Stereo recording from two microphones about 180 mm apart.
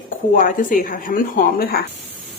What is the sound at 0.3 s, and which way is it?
A woman's voice, 50° left (ahead or behind).